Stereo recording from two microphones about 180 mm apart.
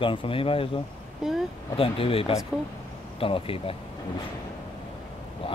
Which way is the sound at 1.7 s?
30° left (ahead or behind).